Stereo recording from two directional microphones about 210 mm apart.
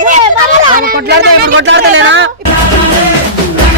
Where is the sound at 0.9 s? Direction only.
55° right (ahead or behind).